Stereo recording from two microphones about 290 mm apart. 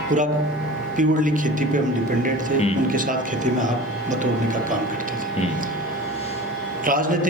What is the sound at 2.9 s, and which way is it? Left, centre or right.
Speech, right.